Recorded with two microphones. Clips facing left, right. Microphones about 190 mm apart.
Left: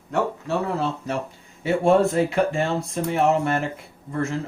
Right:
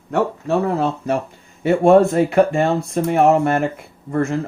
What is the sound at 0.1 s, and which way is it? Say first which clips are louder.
Speech: right 5 dB; 55° right (ahead or behind).